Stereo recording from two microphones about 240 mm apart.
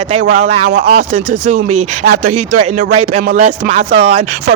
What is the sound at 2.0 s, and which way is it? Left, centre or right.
Speech, right.